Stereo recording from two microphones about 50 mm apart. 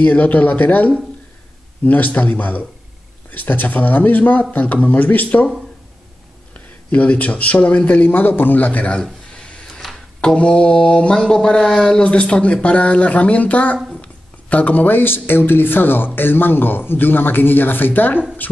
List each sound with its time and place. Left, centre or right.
0.0 s speech: left
6.5 s speech: left
9.3 s a sound: centre
10.2 s a man's voice: left